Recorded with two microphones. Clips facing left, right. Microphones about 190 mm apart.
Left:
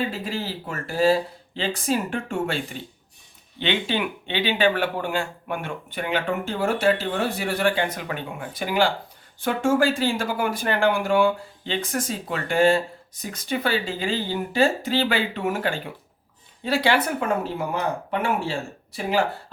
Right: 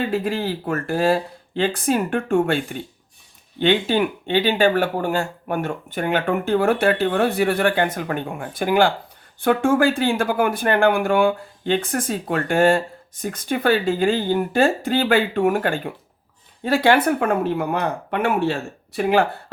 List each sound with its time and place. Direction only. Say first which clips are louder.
0.1 s speech: right 7 dB; 55° right (ahead or behind)